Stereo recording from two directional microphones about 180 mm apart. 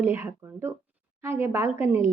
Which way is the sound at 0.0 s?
15° right (ahead or behind).